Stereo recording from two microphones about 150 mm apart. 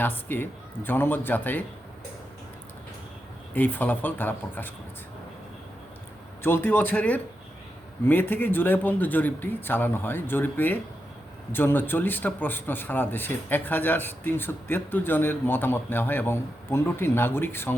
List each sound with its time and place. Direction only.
0.0 s a man's voice: 15° left (ahead or behind)
3.5 s a man's voice: 10° left (ahead or behind)
6.4 s a man's voice: 15° left (ahead or behind)